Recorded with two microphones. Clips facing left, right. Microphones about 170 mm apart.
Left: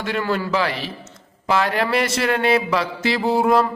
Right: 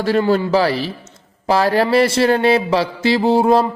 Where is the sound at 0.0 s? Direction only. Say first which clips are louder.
Right 7 dB; 35° right (ahead or behind).